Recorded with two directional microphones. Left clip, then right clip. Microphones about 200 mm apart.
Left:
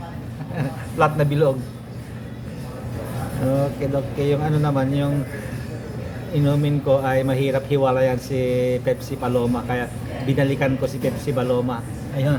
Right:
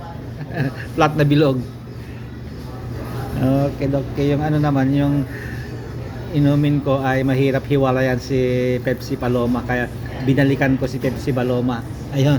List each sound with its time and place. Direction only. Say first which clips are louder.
0.5 s a man's voice: right 3 dB; 10° right (ahead or behind)
3.8 s speech: right 2 dB; centre (ahead or behind)
6.3 s speech: right 4 dB; centre (ahead or behind)
12.1 s a woman's voice: right 5 dB; 25° right (ahead or behind)